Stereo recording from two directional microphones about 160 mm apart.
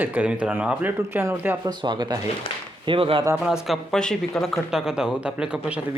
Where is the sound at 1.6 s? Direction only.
30° right (ahead or behind).